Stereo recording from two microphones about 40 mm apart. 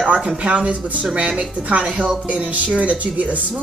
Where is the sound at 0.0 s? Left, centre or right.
Right.